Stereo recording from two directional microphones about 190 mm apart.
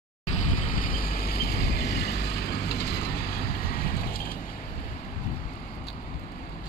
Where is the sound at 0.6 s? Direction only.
45° left (ahead or behind).